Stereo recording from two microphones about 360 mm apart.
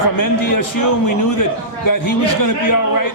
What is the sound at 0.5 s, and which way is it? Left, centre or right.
A man's voice, left.